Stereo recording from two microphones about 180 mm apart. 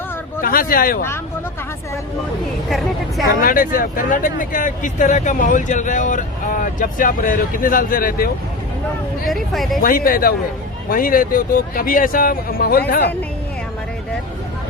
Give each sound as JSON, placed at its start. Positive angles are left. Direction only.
{"t": 0.4, "sound": "speech", "side_deg": 55}
{"t": 2.6, "sound": "speech", "side_deg": 0}
{"t": 3.4, "sound": "speech", "side_deg": 50}
{"t": 9.2, "sound": "speech", "side_deg": 0}
{"t": 9.8, "sound": "speech", "side_deg": 55}